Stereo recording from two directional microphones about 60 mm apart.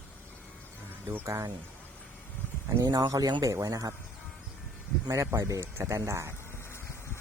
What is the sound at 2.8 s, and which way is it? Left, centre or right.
Speech, right.